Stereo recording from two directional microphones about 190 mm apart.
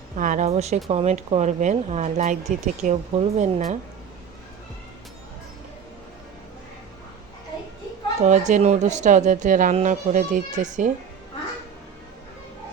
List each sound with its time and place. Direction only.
0.2 s speech: 40° right (ahead or behind)
8.2 s speech: 40° right (ahead or behind)